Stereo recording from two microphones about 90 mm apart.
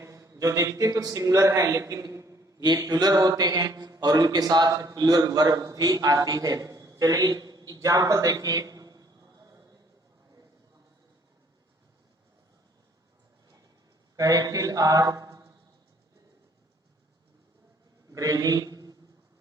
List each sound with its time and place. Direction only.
0.0 s a man's voice: 35° right (ahead or behind)
14.2 s mantra: 40° right (ahead or behind)
18.1 s a man's voice: 40° right (ahead or behind)